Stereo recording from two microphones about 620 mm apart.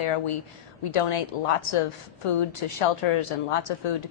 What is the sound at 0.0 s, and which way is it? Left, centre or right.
A woman's voice, left.